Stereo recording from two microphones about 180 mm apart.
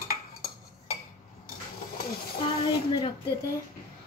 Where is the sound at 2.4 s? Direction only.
30° left (ahead or behind).